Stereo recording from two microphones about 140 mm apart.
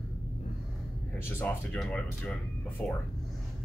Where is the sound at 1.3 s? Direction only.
10° left (ahead or behind).